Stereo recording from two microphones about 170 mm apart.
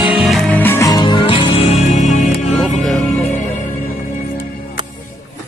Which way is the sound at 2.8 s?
Centre (ahead or behind).